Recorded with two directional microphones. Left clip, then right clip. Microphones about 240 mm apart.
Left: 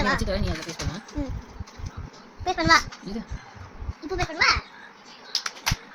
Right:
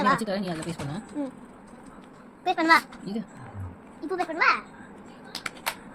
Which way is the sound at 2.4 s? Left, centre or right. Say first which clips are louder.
Left 1 dB; centre.